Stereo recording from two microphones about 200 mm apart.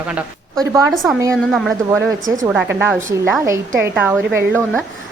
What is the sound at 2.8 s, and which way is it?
A woman's voice, 10° right (ahead or behind).